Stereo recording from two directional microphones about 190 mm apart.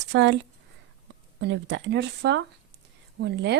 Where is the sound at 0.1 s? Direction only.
70° right (ahead or behind).